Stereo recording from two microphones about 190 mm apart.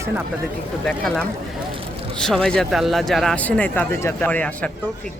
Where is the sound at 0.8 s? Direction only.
5° left (ahead or behind).